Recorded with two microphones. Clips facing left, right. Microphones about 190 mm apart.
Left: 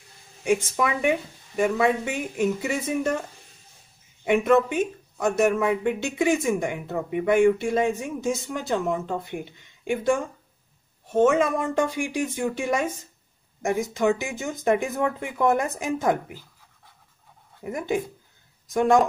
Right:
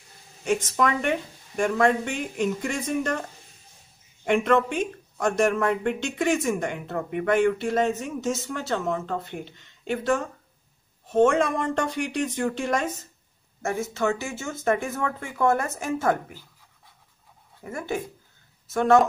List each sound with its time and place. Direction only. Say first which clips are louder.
0.4 s speech: left 1 dB; 10° left (ahead or behind)
17.6 s speech: left 4 dB; 15° left (ahead or behind)